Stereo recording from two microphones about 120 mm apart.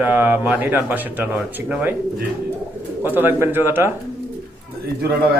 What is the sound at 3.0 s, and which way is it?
Speech, 15° right (ahead or behind).